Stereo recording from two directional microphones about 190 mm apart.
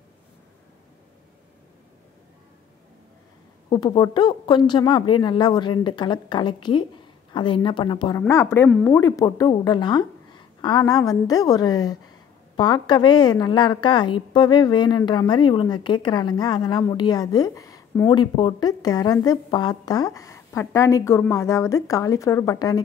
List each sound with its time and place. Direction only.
3.7 s a woman's voice: 20° left (ahead or behind)